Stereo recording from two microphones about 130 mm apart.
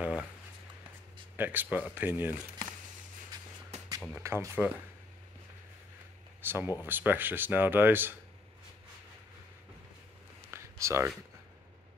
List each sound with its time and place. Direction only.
0.0 s a sound: 10° right (ahead or behind)
1.3 s speech: 15° right (ahead or behind)
3.7 s music: 55° right (ahead or behind)
4.2 s speech: 20° right (ahead or behind)
6.4 s speech: 15° right (ahead or behind)
10.5 s a sound: 20° right (ahead or behind)